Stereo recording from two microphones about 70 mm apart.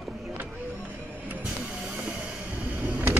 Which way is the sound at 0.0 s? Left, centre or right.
Centre.